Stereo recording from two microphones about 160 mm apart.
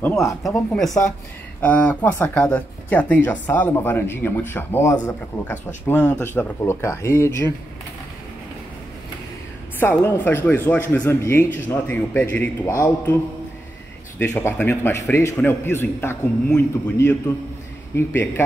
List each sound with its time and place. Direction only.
0.0 s speech: 15° left (ahead or behind)
1.6 s speech: 10° left (ahead or behind)
9.8 s speech: 15° left (ahead or behind)
14.1 s speech: 15° left (ahead or behind)